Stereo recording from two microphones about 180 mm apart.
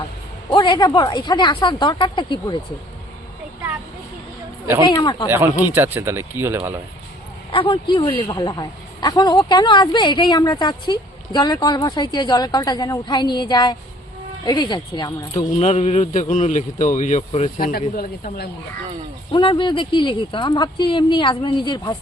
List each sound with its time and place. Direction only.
0.5 s speech: 25° left (ahead or behind)
4.9 s speech: 25° left (ahead or behind)
5.7 s speech: 10° right (ahead or behind)
7.5 s speech: 30° left (ahead or behind)
15.5 s speech: 35° left (ahead or behind)
17.6 s speech: 55° left (ahead or behind)
19.3 s speech: 30° left (ahead or behind)